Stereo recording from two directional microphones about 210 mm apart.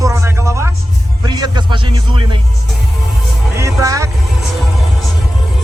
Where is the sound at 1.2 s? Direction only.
20° right (ahead or behind).